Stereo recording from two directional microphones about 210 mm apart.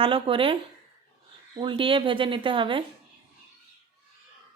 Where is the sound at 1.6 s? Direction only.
25° right (ahead or behind).